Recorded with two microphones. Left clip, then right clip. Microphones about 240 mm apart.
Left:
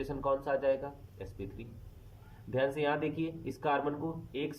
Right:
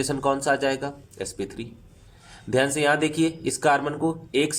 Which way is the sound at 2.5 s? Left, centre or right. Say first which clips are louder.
Right 10 dB; right.